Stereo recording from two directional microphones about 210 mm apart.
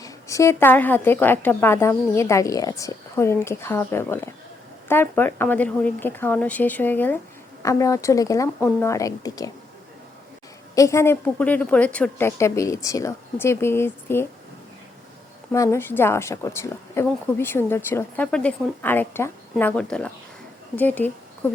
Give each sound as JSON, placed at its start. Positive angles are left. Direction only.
{"t": 0.0, "sound": "speech", "side_deg": 15}
{"t": 10.8, "sound": "speech", "side_deg": 15}
{"t": 15.5, "sound": "speech", "side_deg": 15}